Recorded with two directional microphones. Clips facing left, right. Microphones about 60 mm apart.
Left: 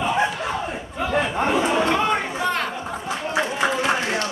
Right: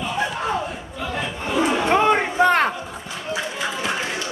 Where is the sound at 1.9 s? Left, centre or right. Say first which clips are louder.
Right 3 dB; right.